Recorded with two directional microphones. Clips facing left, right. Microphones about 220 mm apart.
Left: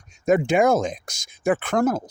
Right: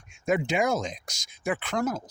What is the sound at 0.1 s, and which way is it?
Speech, 45° left (ahead or behind).